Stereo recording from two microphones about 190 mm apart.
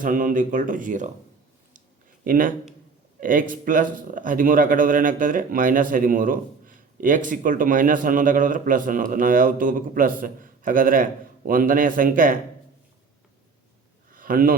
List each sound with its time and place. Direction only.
0.0 s speech: 45° right (ahead or behind)
2.2 s speech: 45° right (ahead or behind)
14.1 s a sound: 50° right (ahead or behind)